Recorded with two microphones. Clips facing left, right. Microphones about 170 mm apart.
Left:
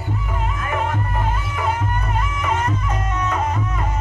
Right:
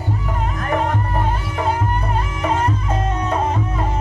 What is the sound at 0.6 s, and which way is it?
Music, 40° right (ahead or behind).